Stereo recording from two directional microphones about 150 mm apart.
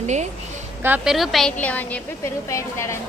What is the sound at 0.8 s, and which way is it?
Speech, 10° right (ahead or behind).